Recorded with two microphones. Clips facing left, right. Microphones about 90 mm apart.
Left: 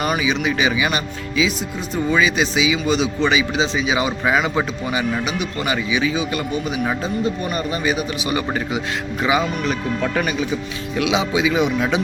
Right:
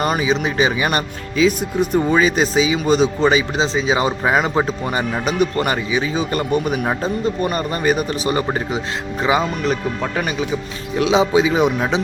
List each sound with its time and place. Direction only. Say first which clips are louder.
0.0 s speech: right 2 dB; 35° right (ahead or behind)